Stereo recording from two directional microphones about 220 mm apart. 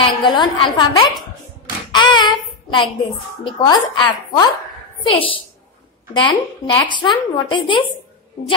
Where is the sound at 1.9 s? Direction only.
20° left (ahead or behind).